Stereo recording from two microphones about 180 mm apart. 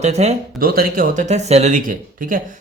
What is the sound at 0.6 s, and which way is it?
Speech, 55° right (ahead or behind).